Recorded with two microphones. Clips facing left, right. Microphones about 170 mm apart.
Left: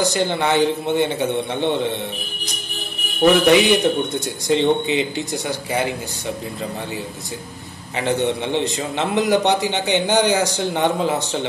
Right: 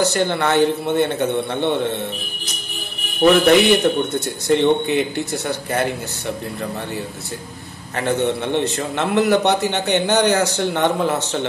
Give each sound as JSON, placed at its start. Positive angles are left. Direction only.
{"t": 0.0, "sound": "a man's voice", "side_deg": 15}
{"t": 3.4, "sound": "a man's voice", "side_deg": 15}
{"t": 7.9, "sound": "a man's voice", "side_deg": 15}